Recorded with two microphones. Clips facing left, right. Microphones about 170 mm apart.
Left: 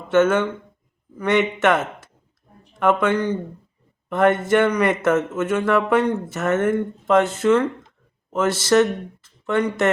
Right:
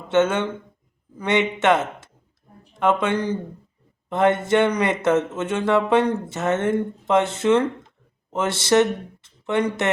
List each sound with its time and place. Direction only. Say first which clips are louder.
0.1 s speech: left 2 dB; 20° right (ahead or behind)